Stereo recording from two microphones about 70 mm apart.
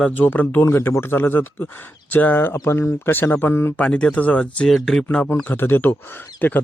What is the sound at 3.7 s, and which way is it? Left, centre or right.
Speech, centre.